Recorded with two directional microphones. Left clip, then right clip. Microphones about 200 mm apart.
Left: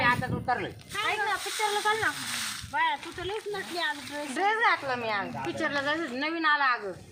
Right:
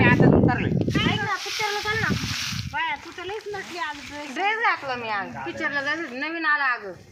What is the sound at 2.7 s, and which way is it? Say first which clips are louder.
Speech: left 1 dB; 5° left (ahead or behind).